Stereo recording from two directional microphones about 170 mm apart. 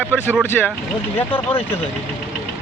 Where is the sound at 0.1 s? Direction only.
10° right (ahead or behind).